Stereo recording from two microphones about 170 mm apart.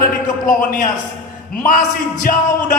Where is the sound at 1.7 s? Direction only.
55° left (ahead or behind).